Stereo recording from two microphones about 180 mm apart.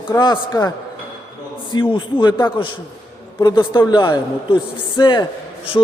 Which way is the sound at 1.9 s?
25° left (ahead or behind).